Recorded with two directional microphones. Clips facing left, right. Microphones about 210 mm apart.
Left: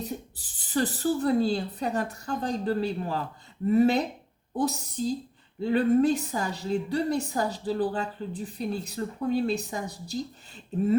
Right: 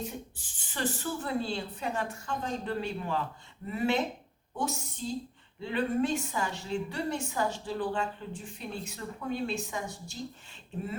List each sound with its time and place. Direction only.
0.0 s a woman's voice: 35° left (ahead or behind)